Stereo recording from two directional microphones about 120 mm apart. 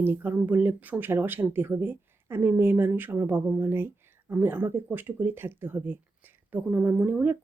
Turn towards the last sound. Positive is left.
turn(degrees=-15)  # may be behind; listen again after turning